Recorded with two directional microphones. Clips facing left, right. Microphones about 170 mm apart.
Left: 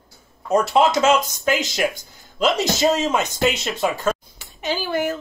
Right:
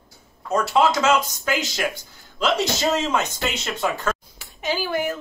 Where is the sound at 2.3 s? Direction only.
15° left (ahead or behind).